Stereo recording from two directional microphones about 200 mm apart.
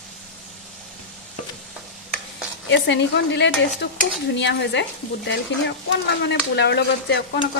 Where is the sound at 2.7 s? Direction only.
60° left (ahead or behind).